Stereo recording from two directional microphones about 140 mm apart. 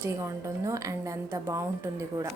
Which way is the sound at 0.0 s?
20° right (ahead or behind).